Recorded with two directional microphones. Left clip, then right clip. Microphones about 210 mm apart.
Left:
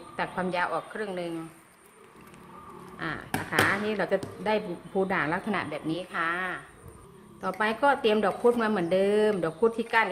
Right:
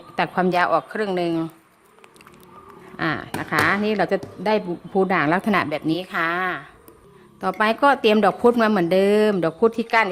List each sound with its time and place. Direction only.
0.2 s speech: 50° right (ahead or behind)
3.0 s speech: 50° right (ahead or behind)